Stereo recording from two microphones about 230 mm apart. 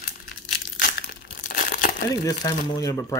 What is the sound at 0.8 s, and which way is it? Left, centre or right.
Crumpling, left.